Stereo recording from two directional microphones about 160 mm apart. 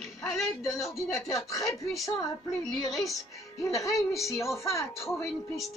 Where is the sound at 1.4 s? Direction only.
20° left (ahead or behind).